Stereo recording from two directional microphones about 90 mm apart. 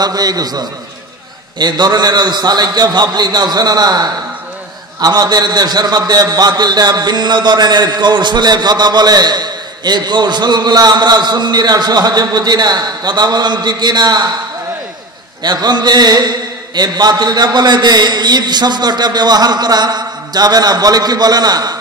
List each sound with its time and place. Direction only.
0.0 s a man's voice: 45° right (ahead or behind)
15.4 s a man's voice: 50° right (ahead or behind)